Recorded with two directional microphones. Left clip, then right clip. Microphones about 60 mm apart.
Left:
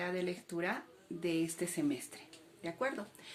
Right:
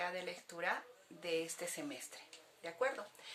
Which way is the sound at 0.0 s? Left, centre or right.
Left.